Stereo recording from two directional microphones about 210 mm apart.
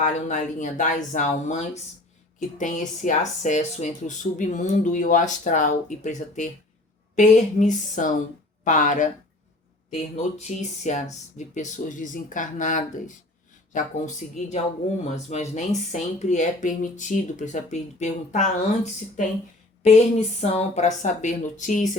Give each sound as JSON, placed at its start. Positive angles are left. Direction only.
{"t": 0.0, "sound": "speech", "side_deg": 35}
{"t": 10.2, "sound": "speech", "side_deg": 35}